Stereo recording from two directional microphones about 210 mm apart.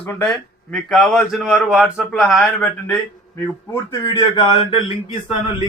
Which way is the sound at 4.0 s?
20° left (ahead or behind).